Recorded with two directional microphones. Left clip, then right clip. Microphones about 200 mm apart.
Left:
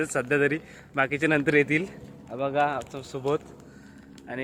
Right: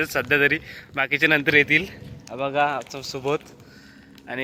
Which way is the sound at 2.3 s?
20° right (ahead or behind).